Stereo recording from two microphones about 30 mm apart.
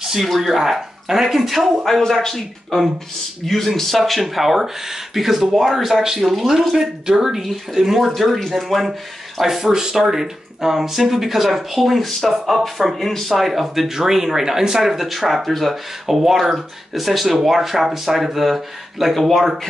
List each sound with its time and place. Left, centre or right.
0.0 s a sound: centre
0.3 s speech: centre
1.9 s speech: centre
6.7 s speech: centre
8.0 s speech: centre
9.4 s speech: centre
13.5 s speech: centre